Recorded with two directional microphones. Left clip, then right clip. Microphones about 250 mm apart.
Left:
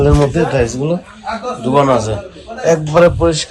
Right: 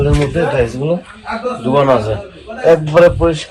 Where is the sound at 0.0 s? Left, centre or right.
Centre.